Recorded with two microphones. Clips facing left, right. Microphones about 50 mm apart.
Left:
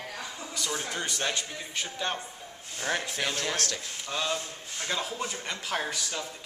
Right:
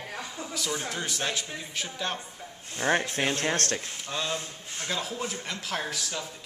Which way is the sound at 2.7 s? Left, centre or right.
Right.